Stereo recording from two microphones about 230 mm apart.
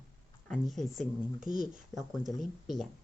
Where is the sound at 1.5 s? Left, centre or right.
Right.